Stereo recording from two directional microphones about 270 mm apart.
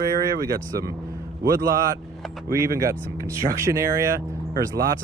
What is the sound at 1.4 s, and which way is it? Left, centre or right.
Speech, right.